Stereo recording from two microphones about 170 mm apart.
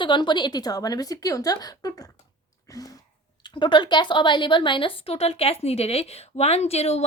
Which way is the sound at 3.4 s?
25° left (ahead or behind).